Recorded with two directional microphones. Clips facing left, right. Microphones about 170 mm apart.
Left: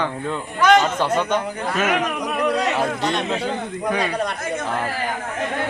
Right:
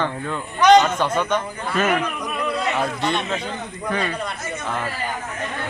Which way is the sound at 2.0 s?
75° left (ahead or behind).